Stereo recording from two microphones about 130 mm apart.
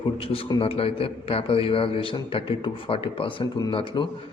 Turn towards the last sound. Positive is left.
turn(degrees=40)  # may be behind; listen again after turning